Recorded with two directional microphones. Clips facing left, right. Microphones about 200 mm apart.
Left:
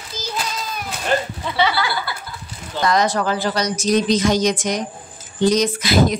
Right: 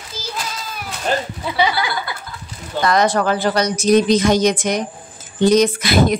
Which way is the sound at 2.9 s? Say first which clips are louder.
Right 3 dB; 55° right (ahead or behind).